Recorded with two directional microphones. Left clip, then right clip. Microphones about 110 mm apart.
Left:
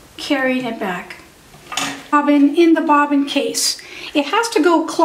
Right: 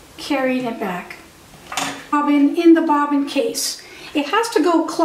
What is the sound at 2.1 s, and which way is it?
A woman's voice, 20° left (ahead or behind).